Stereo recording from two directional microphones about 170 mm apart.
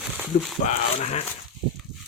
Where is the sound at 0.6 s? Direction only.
40° left (ahead or behind).